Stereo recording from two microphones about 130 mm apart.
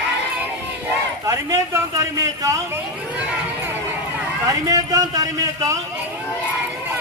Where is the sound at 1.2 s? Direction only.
25° right (ahead or behind).